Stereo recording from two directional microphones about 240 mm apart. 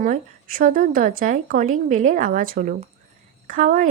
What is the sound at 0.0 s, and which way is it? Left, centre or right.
Speech, right.